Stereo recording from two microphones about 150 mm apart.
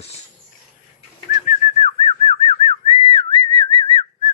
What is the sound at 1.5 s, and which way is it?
Whistling, 45° left (ahead or behind).